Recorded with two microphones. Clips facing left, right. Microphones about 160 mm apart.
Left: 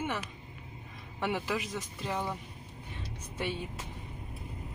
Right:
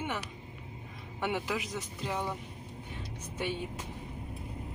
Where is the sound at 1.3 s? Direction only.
10° right (ahead or behind).